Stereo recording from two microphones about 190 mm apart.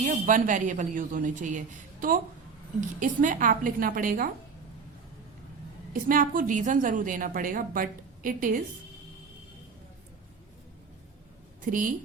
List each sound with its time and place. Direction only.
0.0 s a woman's voice: 45° right (ahead or behind)
5.9 s a woman's voice: 45° right (ahead or behind)
11.6 s a woman's voice: 45° right (ahead or behind)